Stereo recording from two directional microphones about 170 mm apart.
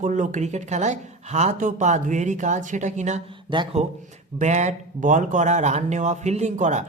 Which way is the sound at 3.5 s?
30° right (ahead or behind).